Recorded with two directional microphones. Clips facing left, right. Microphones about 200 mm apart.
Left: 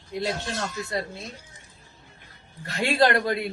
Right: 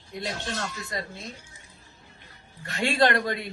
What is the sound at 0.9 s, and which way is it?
Speech, 30° left (ahead or behind).